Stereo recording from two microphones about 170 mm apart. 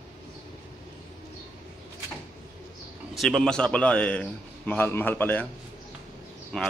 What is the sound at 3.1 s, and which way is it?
A man's voice, centre (ahead or behind).